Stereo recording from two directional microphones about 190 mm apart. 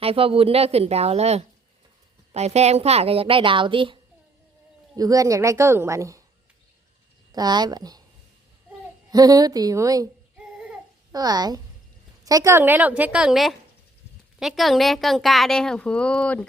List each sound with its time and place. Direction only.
0.0 s a woman's voice: 30° right (ahead or behind)
4.9 s a woman's voice: 20° right (ahead or behind)
7.3 s a woman's voice: 20° right (ahead or behind)
9.0 s a woman's voice: 20° right (ahead or behind)
10.3 s a sound: 5° right (ahead or behind)
11.1 s a woman's voice: 20° right (ahead or behind); by 16.5 s 5° left (ahead or behind)